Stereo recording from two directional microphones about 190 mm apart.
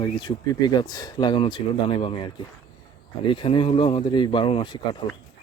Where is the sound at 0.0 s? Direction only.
25° left (ahead or behind).